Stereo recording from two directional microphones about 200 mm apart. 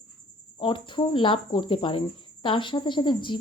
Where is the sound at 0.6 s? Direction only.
25° left (ahead or behind).